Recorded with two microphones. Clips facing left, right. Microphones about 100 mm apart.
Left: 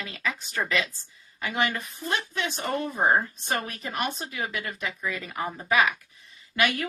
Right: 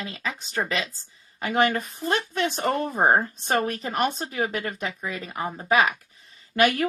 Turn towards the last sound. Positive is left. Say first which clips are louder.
# right 5 dB
turn(degrees=-40)  # may be behind; listen again after turning